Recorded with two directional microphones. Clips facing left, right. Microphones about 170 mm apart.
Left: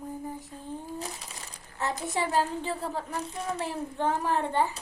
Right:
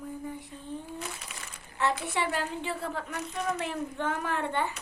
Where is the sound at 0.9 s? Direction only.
35° left (ahead or behind).